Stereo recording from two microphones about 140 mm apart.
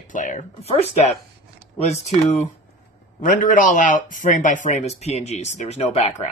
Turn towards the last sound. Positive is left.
turn(degrees=50)  # may be behind; listen again after turning